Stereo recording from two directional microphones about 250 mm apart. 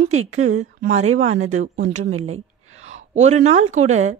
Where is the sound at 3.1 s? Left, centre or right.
Right.